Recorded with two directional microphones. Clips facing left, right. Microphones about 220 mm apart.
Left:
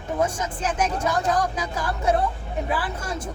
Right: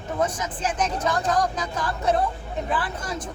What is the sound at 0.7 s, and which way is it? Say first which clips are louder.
Speech: left 1 dB; 10° left (ahead or behind).